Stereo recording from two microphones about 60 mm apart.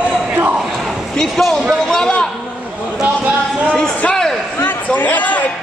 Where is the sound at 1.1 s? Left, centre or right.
Centre.